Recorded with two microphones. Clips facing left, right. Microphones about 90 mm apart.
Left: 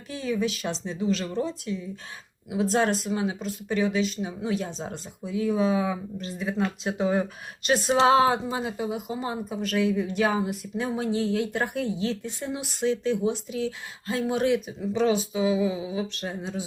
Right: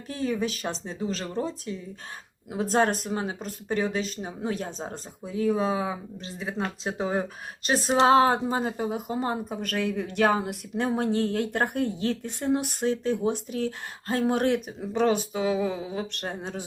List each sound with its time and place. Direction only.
0.1 s speech: 40° right (ahead or behind)
2.5 s speech: 45° right (ahead or behind)